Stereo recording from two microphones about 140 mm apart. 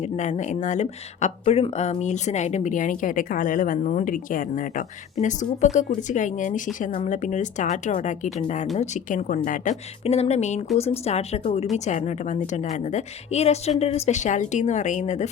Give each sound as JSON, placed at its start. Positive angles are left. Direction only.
{"t": 0.0, "sound": "a woman's voice", "side_deg": 60}
{"t": 5.2, "sound": "a woman's voice", "side_deg": 60}
{"t": 10.0, "sound": "a woman's voice", "side_deg": 50}